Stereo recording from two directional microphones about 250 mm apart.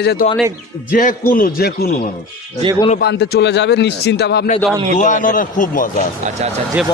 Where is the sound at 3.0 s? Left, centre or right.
Left.